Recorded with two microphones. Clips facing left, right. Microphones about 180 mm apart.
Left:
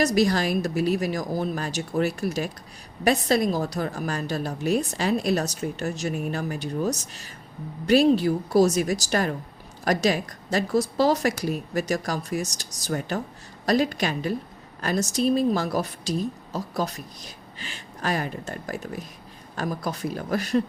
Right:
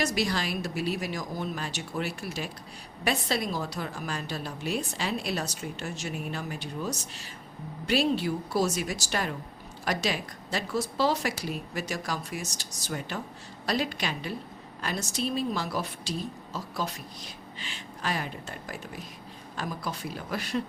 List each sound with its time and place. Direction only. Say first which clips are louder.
0.0 s speech: left 7 dB; 40° left (ahead or behind)